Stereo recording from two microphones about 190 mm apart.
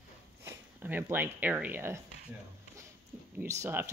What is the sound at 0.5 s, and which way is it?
Speech, 10° right (ahead or behind).